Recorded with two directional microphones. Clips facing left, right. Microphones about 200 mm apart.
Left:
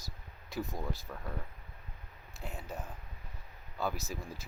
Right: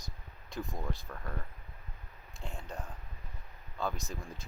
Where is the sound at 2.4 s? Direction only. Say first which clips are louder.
Left 1 dB; 5° left (ahead or behind).